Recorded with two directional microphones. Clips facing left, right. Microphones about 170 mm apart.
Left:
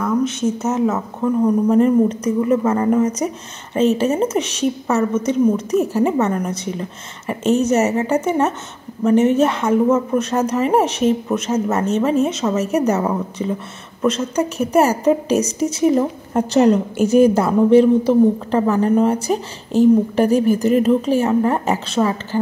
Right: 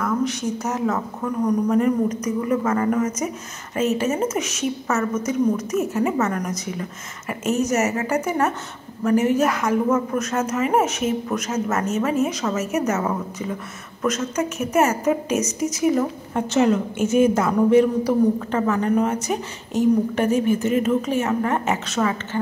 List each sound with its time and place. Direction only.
0.0 s a woman's voice: 25° left (ahead or behind)